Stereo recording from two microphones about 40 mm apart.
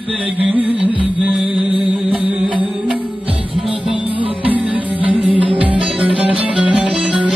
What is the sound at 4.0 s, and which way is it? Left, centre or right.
Music, right.